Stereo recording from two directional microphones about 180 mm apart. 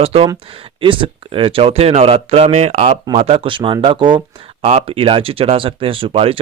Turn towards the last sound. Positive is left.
turn(degrees=-30)  # may be behind; listen again after turning